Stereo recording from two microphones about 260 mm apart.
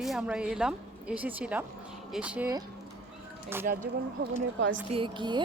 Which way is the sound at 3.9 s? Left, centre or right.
Right.